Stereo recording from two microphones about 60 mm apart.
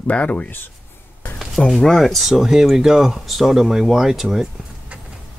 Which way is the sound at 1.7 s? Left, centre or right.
Centre.